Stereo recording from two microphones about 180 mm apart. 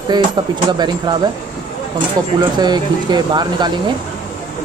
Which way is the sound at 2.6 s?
25° right (ahead or behind).